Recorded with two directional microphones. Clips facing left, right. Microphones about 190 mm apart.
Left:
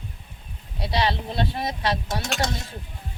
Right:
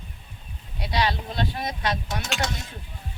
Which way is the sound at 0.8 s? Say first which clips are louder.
Left 1 dB; 30° left (ahead or behind).